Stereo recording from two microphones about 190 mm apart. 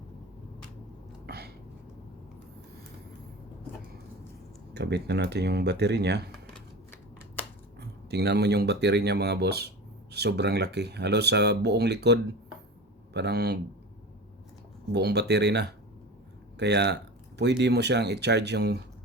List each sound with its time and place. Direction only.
1.3 s a sound: 60° right (ahead or behind)
4.7 s speech: 60° right (ahead or behind)
7.8 s speech: 60° right (ahead or behind)
14.9 s speech: 60° right (ahead or behind)